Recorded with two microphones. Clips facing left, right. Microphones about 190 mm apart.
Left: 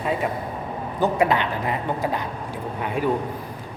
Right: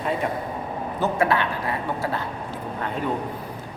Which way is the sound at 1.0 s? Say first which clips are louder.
Left 2 dB; 15° left (ahead or behind).